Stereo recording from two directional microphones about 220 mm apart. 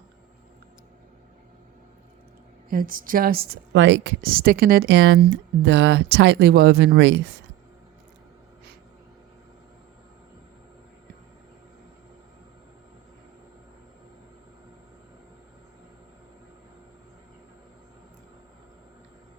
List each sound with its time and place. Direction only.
2.6 s a woman's voice: 40° right (ahead or behind); by 7.3 s 55° right (ahead or behind)